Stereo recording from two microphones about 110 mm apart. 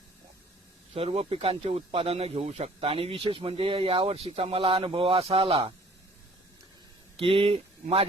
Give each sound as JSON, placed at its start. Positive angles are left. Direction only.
{"t": 0.9, "sound": "speech", "side_deg": -60}
{"t": 7.2, "sound": "speech", "side_deg": -55}